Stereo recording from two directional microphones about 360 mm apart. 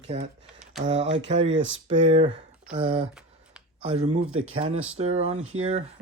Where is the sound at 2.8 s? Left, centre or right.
Centre.